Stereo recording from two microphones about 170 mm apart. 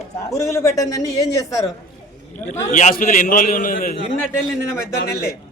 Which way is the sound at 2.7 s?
50° left (ahead or behind).